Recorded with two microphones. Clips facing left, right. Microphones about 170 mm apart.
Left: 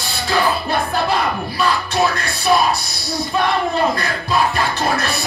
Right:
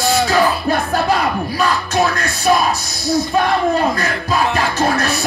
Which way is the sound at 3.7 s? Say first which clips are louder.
Right 1 dB; 40° right (ahead or behind).